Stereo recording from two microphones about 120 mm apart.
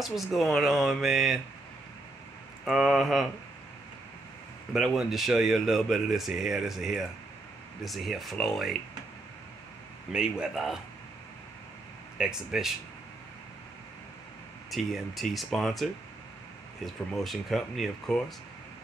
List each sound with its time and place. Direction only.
0.0 s speech: centre (ahead or behind)
2.6 s speech: centre (ahead or behind)
4.7 s speech: centre (ahead or behind)
10.1 s speech: 5° right (ahead or behind)
12.2 s speech: 5° right (ahead or behind)
14.7 s speech: centre (ahead or behind)